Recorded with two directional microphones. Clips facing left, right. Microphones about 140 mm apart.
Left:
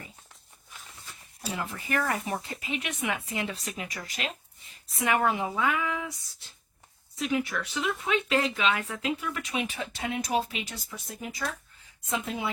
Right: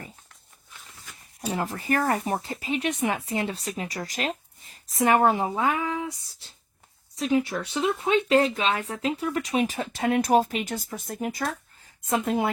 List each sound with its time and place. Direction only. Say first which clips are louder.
1.4 s speech: right 6 dB; 35° right (ahead or behind)